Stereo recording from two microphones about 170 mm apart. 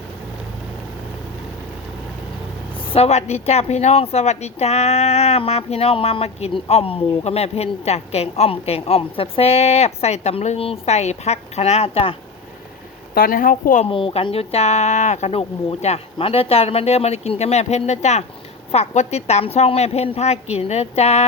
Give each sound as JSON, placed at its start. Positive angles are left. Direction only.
{"t": 2.9, "sound": "a woman's voice", "side_deg": 40}
{"t": 13.1, "sound": "a woman's voice", "side_deg": 55}
{"t": 13.8, "sound": "a woman's voice", "side_deg": 30}